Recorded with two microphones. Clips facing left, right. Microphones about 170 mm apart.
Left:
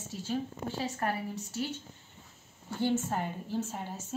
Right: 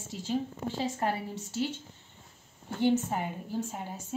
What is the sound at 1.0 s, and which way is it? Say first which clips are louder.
Speech: right 2 dB; 25° right (ahead or behind).